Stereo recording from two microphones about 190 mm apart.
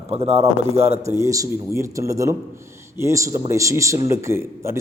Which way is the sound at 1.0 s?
15° right (ahead or behind).